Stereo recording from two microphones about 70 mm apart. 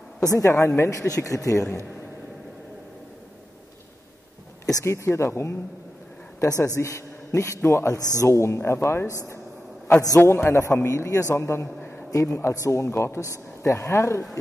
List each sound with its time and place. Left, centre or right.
0.2 s speech: left
0.5 s a woman's voice: left
4.8 s a man's voice: left
10.2 s a man's voice: left
12.1 s a man's voice: left